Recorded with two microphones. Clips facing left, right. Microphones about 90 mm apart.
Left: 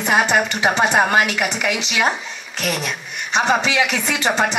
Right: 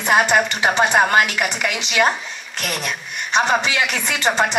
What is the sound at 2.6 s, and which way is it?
Speech, 60° right (ahead or behind).